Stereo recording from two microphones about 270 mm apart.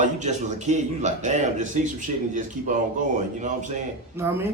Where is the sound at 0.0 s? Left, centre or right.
Right.